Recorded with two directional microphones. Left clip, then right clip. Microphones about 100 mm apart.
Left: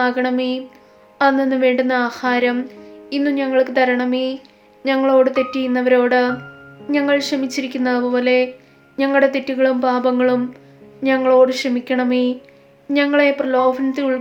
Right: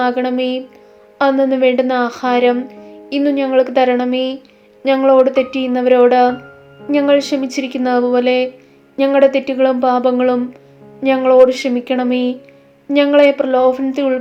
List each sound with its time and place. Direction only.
0.0 s speech: 20° right (ahead or behind)